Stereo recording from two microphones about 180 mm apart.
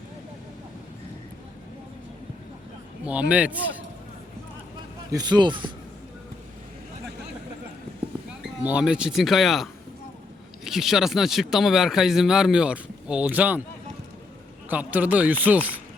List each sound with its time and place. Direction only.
3.0 s speech: 5° right (ahead or behind)
5.1 s a man's voice: 25° right (ahead or behind)
8.3 s speech: 5° right (ahead or behind)
14.7 s speech: 10° right (ahead or behind)